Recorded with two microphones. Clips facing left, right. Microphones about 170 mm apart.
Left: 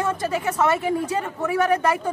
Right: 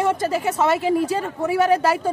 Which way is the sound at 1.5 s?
30° right (ahead or behind).